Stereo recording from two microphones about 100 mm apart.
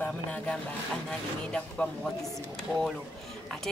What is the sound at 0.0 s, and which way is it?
Speech, 15° left (ahead or behind).